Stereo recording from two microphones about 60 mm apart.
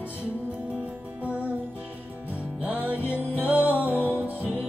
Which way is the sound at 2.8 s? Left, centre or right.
Right.